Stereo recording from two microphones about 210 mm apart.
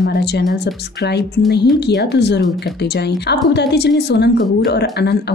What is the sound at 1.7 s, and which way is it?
Speech, 55° left (ahead or behind).